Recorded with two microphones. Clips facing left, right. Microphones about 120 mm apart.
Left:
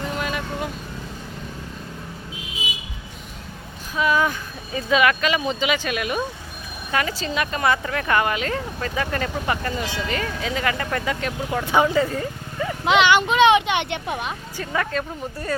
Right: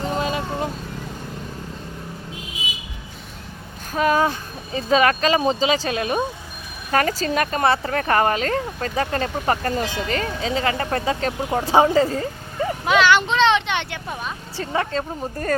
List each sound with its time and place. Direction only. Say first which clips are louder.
0.0 s vehicle: right 3 dB; 30° right (ahead or behind)
3.9 s speech: right 2 dB; 45° right (ahead or behind)
6.9 s speech: right 4 dB; 40° right (ahead or behind)
12.8 s speech: even; 20° left (ahead or behind)
14.5 s speech: right 2 dB; 30° right (ahead or behind)